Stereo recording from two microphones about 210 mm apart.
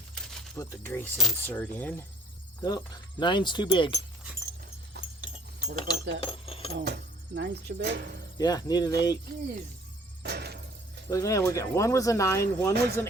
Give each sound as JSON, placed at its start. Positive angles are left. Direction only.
{"t": 0.1, "sound": "a sound", "side_deg": 5}
{"t": 0.6, "sound": "speech", "side_deg": 10}
{"t": 4.9, "sound": "keys jangling", "side_deg": -50}
{"t": 5.9, "sound": "speech", "side_deg": 25}
{"t": 6.8, "sound": "speech", "side_deg": -50}
{"t": 8.4, "sound": "speech", "side_deg": 20}
{"t": 10.2, "sound": "a sound", "side_deg": -50}
{"t": 11.1, "sound": "speech", "side_deg": 15}
{"t": 12.7, "sound": "speech", "side_deg": -50}